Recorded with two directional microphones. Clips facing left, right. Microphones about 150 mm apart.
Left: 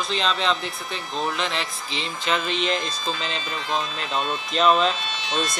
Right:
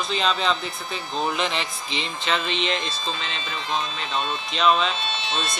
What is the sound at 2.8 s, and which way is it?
Speech, 40° left (ahead or behind).